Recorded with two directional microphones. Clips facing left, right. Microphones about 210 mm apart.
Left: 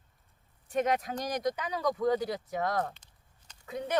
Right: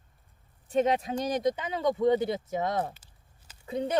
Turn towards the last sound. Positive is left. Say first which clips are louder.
# right 3 dB
turn(degrees=-30)  # may be behind; listen again after turning